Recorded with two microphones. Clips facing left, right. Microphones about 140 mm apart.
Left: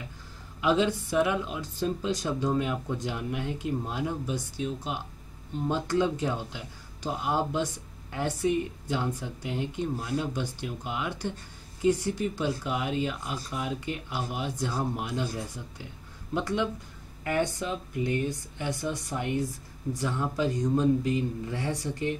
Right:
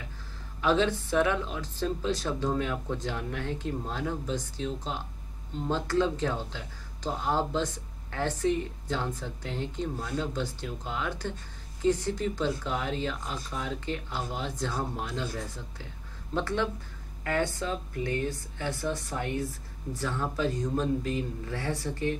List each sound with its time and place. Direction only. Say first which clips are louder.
0.6 s speech: left 1 dB; 10° left (ahead or behind)